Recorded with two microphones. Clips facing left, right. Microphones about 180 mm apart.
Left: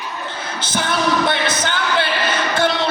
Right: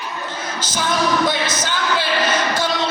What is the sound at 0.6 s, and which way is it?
Music, 60° left (ahead or behind).